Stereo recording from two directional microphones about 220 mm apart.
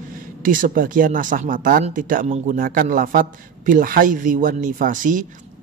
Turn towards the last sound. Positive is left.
turn(degrees=-35)  # may be behind; listen again after turning